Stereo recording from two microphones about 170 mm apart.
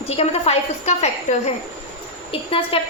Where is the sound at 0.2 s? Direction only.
40° left (ahead or behind).